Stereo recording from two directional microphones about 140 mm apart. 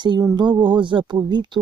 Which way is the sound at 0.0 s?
35° right (ahead or behind).